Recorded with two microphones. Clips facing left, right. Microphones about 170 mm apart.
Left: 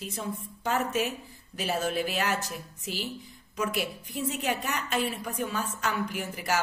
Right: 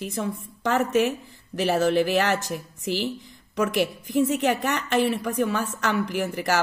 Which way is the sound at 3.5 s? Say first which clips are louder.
Right 7 dB; 75° right (ahead or behind).